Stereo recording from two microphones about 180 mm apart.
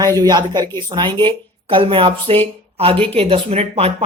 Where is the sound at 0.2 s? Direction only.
20° right (ahead or behind).